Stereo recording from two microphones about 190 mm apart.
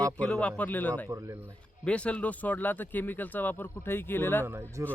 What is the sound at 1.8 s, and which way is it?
Speech, 5° left (ahead or behind).